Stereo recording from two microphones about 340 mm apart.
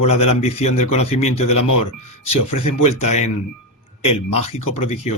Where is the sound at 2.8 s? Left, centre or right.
Centre.